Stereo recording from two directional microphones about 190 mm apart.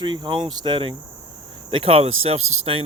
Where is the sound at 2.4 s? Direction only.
90° right.